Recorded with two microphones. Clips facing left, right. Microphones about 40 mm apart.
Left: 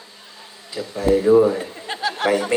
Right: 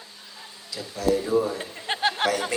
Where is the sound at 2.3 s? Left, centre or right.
Left.